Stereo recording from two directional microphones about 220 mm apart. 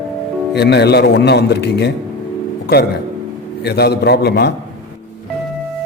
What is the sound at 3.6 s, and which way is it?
Speech, 50° left (ahead or behind).